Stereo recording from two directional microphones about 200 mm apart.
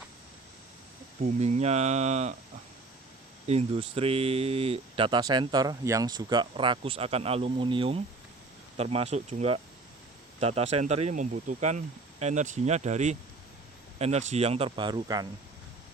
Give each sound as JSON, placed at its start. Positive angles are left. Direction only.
{"t": 1.2, "sound": "speech", "side_deg": -35}
{"t": 3.4, "sound": "speech", "side_deg": -30}